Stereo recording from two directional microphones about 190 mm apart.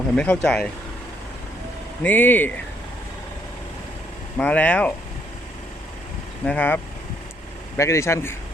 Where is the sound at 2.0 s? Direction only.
10° left (ahead or behind).